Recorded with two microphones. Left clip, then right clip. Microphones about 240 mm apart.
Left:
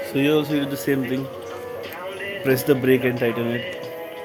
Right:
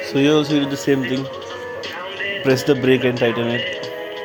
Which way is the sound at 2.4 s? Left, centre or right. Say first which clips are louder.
Right 2 dB; centre.